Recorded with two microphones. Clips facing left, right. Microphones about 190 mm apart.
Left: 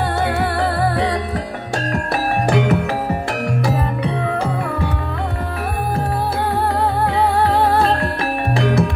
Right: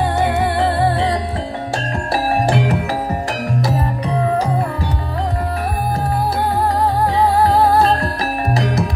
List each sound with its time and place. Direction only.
0.2 s music: 20° right (ahead or behind)
2.4 s music: 35° right (ahead or behind)
7.3 s music: 35° right (ahead or behind)